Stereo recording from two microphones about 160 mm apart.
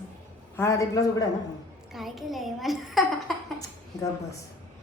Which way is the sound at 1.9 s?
Centre (ahead or behind).